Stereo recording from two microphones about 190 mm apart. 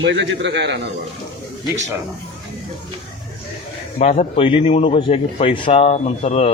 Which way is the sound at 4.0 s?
35° left (ahead or behind).